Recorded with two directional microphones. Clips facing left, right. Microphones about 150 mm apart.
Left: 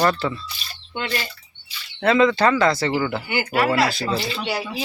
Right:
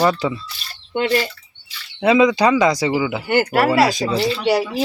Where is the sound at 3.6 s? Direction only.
10° right (ahead or behind).